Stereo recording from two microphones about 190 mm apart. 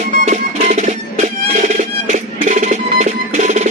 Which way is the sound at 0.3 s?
40° right (ahead or behind).